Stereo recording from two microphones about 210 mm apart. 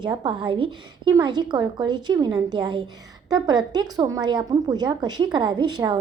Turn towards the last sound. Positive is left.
turn(degrees=-20)  # may be behind; listen again after turning